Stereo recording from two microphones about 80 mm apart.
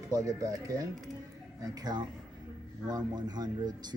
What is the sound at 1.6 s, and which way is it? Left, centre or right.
Speech, right.